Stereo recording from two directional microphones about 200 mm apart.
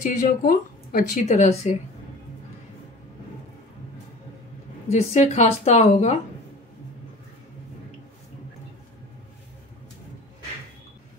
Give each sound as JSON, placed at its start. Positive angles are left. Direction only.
{"t": 0.0, "sound": "a woman's voice", "side_deg": 40}
{"t": 4.8, "sound": "a woman's voice", "side_deg": 30}